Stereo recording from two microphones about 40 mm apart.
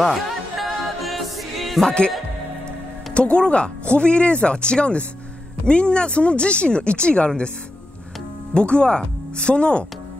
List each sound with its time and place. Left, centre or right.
0.0 s music: centre
1.9 s speech: left
3.2 s speech: left
8.5 s speech: left